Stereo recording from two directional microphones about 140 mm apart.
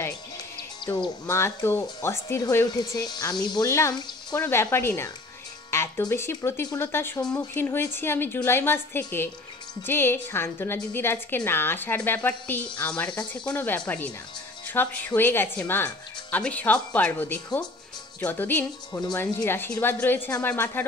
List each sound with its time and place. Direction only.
0.8 s speech: 25° left (ahead or behind)
18.9 s speech: 30° left (ahead or behind)
19.1 s speech: 15° left (ahead or behind)